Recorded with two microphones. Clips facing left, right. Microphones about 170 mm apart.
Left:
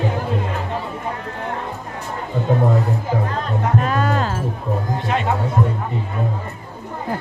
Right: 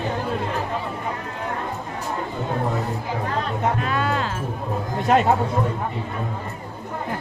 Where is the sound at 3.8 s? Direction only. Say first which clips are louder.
Left 4 dB; 45° left (ahead or behind).